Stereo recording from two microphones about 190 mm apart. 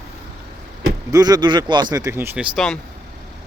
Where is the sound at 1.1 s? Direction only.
20° right (ahead or behind).